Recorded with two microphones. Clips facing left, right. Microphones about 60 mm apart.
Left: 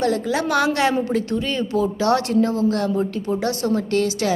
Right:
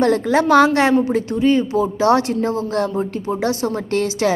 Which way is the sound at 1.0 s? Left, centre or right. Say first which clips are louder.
Right 5 dB; centre.